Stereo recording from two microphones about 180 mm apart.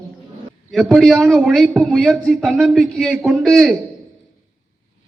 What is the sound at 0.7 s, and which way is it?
A man's voice, centre (ahead or behind).